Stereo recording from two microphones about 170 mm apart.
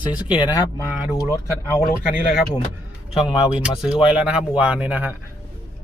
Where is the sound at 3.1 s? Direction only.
5° right (ahead or behind).